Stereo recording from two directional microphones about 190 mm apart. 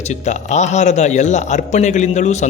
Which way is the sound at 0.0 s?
40° left (ahead or behind).